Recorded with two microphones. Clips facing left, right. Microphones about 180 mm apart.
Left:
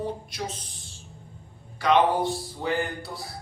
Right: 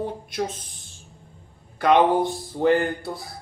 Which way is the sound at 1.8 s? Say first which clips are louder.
Right 3 dB; 50° right (ahead or behind).